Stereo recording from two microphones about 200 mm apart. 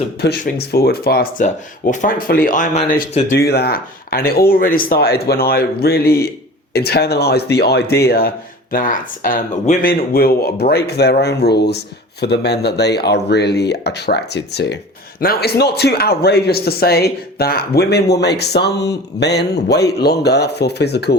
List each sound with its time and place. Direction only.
0.2 s speech: 55° left (ahead or behind)
1.5 s speech: 40° left (ahead or behind)
3.3 s speech: 55° left (ahead or behind)